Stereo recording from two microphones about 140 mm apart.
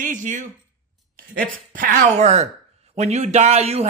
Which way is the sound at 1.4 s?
85° right.